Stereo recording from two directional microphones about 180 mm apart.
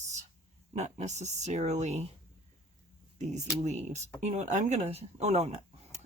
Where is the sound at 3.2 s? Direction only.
40° right (ahead or behind).